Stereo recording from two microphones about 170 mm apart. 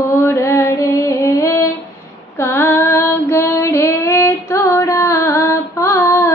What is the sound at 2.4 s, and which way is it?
Female singing, 15° left (ahead or behind).